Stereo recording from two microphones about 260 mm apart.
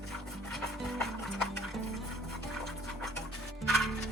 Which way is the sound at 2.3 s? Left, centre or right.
Centre.